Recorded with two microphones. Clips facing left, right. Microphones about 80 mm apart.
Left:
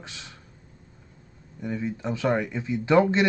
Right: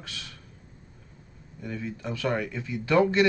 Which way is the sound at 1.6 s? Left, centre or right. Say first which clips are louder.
Left 5 dB; left.